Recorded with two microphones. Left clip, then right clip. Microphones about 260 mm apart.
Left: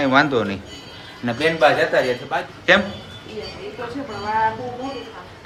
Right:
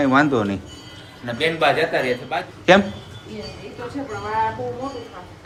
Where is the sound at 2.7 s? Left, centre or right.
Centre.